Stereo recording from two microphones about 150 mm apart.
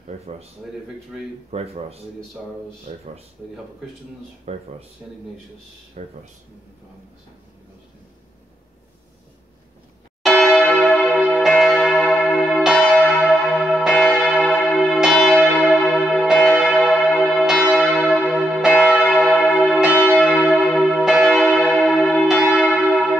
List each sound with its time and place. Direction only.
1.5 s speech: 45° right (ahead or behind)
4.5 s speech: 45° right (ahead or behind)
6.0 s speech: 50° right (ahead or behind)
10.2 s church bell: 5° left (ahead or behind)
17.4 s church bell: 5° right (ahead or behind)